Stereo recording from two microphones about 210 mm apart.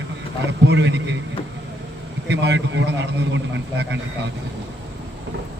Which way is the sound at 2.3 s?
55° right (ahead or behind).